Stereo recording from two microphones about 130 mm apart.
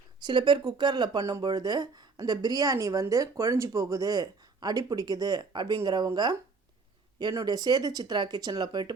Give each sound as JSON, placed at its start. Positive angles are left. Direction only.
{"t": 0.2, "sound": "speech", "side_deg": -35}
{"t": 7.2, "sound": "speech", "side_deg": -30}